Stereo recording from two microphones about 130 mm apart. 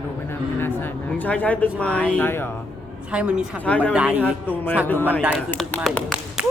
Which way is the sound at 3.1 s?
10° right (ahead or behind).